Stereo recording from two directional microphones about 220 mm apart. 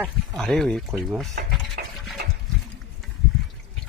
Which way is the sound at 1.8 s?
40° right (ahead or behind).